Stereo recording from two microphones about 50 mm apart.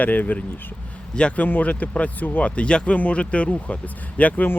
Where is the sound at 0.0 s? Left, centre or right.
Left.